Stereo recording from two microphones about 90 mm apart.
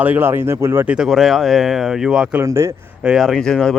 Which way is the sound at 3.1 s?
Centre (ahead or behind).